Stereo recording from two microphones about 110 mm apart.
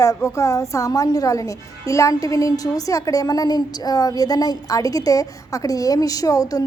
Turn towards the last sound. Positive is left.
turn(degrees=35)  # may be behind; listen again after turning